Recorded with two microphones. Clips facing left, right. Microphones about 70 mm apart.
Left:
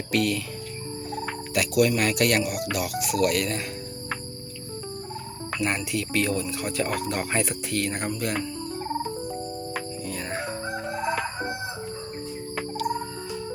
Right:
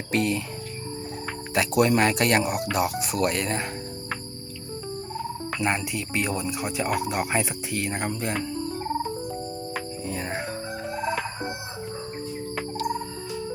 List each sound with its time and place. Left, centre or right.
0.1 s speech: right
1.5 s speech: right
5.5 s speech: right
9.2 s music: centre
10.1 s music: right